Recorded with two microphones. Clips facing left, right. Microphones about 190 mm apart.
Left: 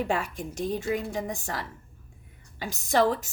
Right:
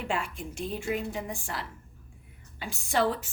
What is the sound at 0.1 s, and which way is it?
A woman's voice, 40° left (ahead or behind).